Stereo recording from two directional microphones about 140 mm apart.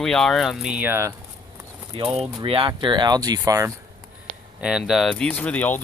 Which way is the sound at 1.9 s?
45° right (ahead or behind).